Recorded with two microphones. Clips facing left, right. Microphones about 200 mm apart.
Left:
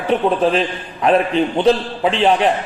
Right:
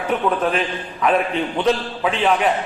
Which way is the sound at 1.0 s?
30° left (ahead or behind).